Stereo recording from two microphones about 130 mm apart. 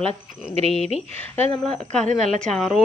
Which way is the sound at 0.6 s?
50° right (ahead or behind).